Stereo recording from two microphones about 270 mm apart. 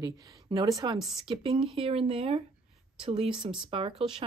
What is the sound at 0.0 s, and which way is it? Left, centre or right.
A woman's voice, centre.